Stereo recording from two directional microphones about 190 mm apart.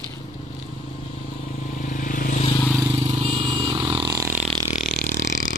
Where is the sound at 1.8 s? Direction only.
45° left (ahead or behind).